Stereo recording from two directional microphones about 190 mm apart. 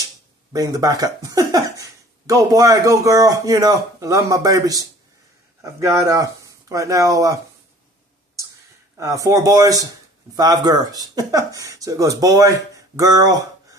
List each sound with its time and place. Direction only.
0.5 s speech: 20° right (ahead or behind)
8.9 s speech: 15° right (ahead or behind)